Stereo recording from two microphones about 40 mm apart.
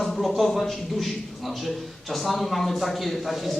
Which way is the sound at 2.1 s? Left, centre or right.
Centre.